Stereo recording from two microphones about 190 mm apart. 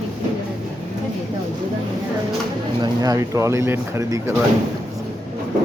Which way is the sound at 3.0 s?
15° right (ahead or behind).